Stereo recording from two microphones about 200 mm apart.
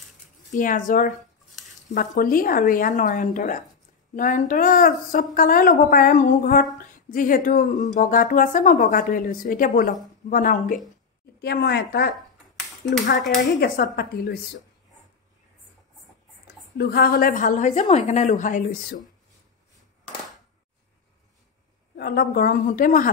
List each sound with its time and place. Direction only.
0.5 s a woman's voice: 40° left (ahead or behind)
11.4 s a woman's voice: 55° left (ahead or behind)
12.5 s a sound: centre (ahead or behind)
16.7 s a woman's voice: 50° left (ahead or behind)
21.9 s a woman's voice: 50° left (ahead or behind)